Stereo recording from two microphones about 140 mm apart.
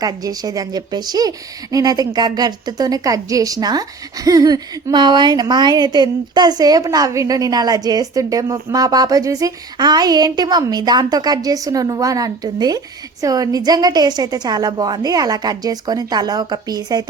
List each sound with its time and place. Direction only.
0.0 s a woman's voice: 25° right (ahead or behind)